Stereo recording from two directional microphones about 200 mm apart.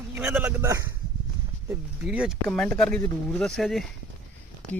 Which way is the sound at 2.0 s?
5° right (ahead or behind).